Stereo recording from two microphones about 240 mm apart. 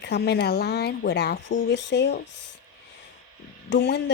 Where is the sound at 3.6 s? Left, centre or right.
Left.